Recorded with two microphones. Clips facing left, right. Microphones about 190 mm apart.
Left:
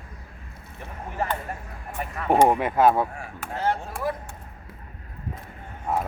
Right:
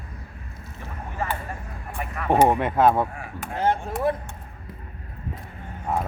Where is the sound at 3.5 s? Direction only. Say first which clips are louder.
Right 3 dB; 20° right (ahead or behind).